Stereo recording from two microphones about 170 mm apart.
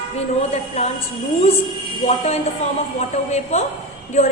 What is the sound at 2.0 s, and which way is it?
A woman's voice, 40° left (ahead or behind).